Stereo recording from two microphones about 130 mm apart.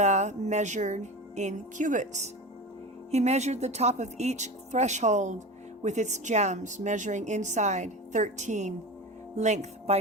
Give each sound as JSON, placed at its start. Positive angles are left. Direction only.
{"t": 0.0, "sound": "a woman's voice", "side_deg": -60}
{"t": 3.1, "sound": "a woman's voice", "side_deg": -60}